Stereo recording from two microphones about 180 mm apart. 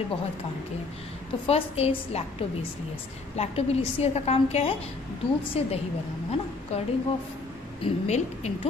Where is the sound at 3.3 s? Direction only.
35° left (ahead or behind).